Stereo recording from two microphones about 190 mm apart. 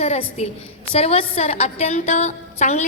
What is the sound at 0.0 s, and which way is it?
A woman's voice, 35° left (ahead or behind).